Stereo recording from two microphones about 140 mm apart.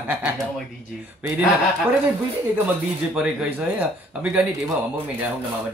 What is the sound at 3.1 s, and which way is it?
Speech, 10° right (ahead or behind).